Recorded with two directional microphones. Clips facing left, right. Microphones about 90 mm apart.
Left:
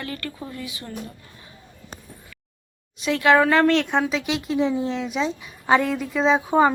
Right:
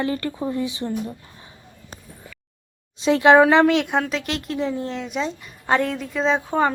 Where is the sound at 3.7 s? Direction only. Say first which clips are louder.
Even; 5° right (ahead or behind).